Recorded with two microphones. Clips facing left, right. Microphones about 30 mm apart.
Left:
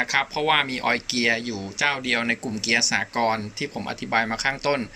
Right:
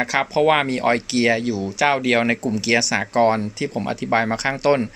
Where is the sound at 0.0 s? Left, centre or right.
Centre.